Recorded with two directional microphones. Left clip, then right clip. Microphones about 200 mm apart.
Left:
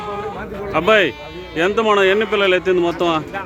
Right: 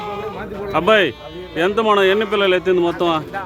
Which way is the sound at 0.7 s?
10° right (ahead or behind).